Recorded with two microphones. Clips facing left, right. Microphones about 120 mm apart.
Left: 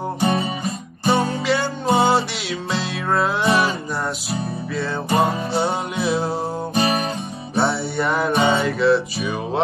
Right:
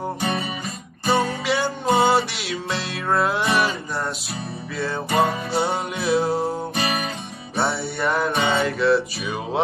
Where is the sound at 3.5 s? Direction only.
30° left (ahead or behind).